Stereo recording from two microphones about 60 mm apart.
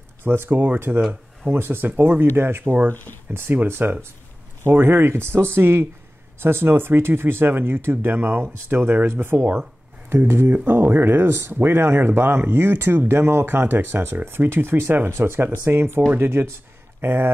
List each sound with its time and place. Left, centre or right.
0.2 s speech: right